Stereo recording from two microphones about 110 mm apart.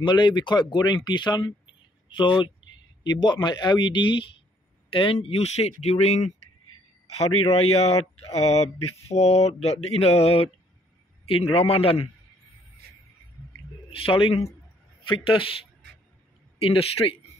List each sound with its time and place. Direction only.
0.0 s speech: 45° left (ahead or behind)
4.8 s mantra: 55° left (ahead or behind); by 6.3 s 90° left
7.1 s a man's voice: 70° left (ahead or behind)
7.5 s mantra: 70° left (ahead or behind)
11.2 s a man's voice: 60° left (ahead or behind)
13.8 s a man's voice: 55° left (ahead or behind)